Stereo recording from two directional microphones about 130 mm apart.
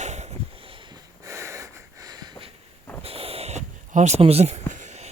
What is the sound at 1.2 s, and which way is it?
Sniff, 25° right (ahead or behind).